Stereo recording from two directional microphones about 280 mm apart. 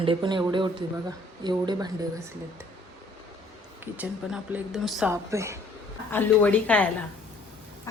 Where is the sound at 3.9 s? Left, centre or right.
Centre.